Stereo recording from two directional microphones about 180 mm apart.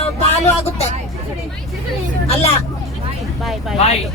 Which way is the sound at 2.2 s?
35° left (ahead or behind).